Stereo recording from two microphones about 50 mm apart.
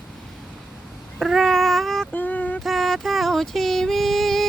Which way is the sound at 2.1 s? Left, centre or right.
Left.